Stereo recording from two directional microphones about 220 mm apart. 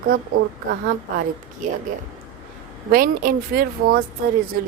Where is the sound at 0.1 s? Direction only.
40° right (ahead or behind).